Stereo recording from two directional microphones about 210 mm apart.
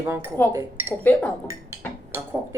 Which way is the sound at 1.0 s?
5° left (ahead or behind).